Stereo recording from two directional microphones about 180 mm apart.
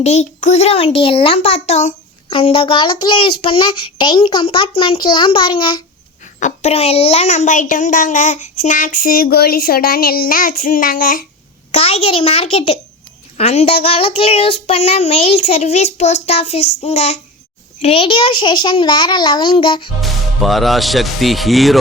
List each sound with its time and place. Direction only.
0.0 s child singing: 40° left (ahead or behind)
2.3 s a child's voice: 30° left (ahead or behind); by 11.3 s 50° left (ahead or behind)
11.7 s child singing: 35° left (ahead or behind)
17.8 s a child's voice: 30° left (ahead or behind)
20.0 s speech: centre (ahead or behind)